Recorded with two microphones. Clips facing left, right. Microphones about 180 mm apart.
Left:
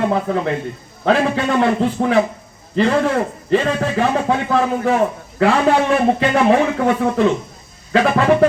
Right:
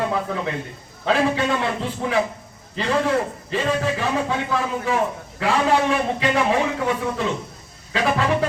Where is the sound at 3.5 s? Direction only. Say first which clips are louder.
Left 5 dB; 55° left (ahead or behind).